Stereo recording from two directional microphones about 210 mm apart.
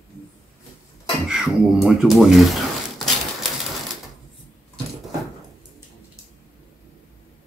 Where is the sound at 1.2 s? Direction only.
5° right (ahead or behind).